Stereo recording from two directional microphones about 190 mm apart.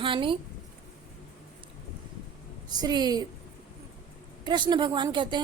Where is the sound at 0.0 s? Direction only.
25° right (ahead or behind).